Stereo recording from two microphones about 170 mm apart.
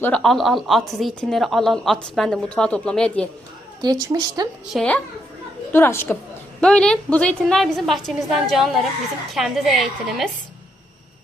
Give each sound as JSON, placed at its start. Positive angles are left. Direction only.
{"t": 0.0, "sound": "a woman's voice", "side_deg": 5}
{"t": 3.8, "sound": "a woman's voice", "side_deg": -25}
{"t": 4.7, "sound": "a woman's voice", "side_deg": 5}